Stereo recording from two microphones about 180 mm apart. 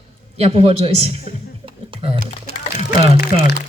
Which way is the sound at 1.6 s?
30° right (ahead or behind).